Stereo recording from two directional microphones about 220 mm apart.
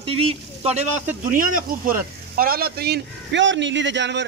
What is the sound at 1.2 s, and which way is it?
Speech, 40° right (ahead or behind).